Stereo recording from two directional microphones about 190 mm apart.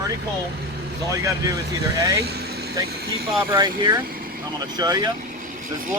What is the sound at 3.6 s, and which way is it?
Speech, 20° right (ahead or behind).